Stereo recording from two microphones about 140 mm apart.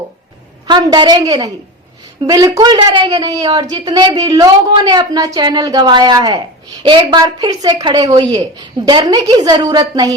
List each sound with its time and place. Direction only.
0.7 s a woman's voice: 30° right (ahead or behind)